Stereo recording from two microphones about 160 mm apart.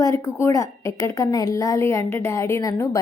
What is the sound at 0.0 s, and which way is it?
A woman's voice, 20° left (ahead or behind).